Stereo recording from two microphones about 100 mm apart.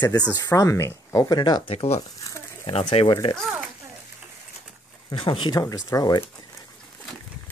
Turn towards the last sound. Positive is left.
turn(degrees=40)  # may be behind; listen again after turning